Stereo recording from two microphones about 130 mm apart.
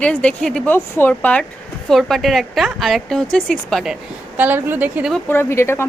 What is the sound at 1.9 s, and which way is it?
A woman's voice, centre (ahead or behind).